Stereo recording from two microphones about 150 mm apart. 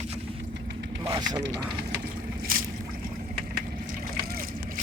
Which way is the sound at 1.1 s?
30° right (ahead or behind).